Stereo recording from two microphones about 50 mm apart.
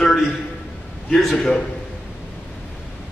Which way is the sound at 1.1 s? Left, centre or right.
Centre.